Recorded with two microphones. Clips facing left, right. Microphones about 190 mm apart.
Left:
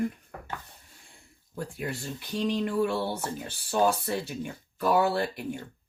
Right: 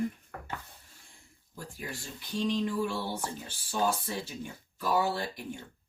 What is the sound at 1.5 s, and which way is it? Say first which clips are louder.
Speech: left 7 dB; 65° left (ahead or behind).